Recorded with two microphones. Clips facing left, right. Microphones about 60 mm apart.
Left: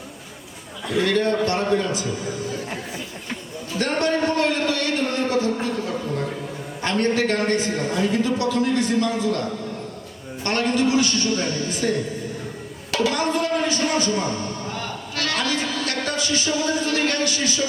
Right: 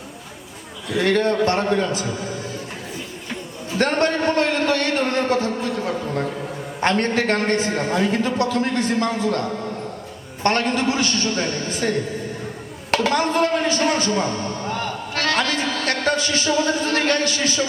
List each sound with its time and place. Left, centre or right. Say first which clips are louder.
0.9 s a man's voice: right 2 dB; right
3.8 s a man's voice: right 2 dB; right
5.6 s a sound: right 1 dB; right
6.8 s a man's voice: right 2 dB; right
12.9 s music: right 2 dB; right